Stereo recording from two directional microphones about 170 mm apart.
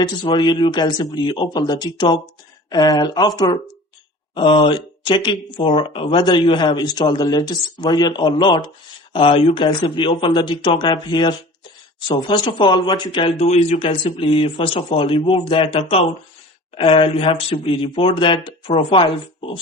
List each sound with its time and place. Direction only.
0.0 s speech: 25° left (ahead or behind)